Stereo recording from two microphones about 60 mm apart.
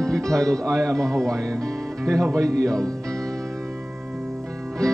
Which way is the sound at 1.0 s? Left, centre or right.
Centre.